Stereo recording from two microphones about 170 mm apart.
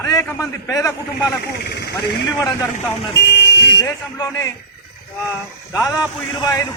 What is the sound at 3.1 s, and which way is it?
Vehicle, 80° left.